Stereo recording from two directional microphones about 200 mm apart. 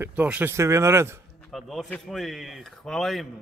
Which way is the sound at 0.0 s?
10° right (ahead or behind).